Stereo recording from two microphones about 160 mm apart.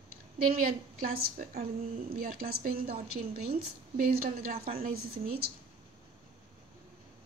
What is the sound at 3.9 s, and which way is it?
Speech, 65° right (ahead or behind).